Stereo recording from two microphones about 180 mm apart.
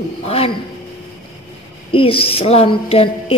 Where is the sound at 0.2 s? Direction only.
35° left (ahead or behind).